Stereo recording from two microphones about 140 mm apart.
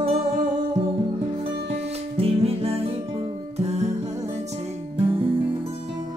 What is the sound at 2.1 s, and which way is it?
Music, 45° right (ahead or behind).